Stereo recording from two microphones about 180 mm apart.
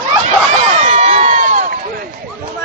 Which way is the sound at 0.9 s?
45° right (ahead or behind).